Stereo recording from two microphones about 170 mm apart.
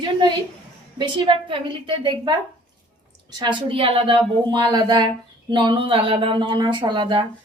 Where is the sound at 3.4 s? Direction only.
30° right (ahead or behind).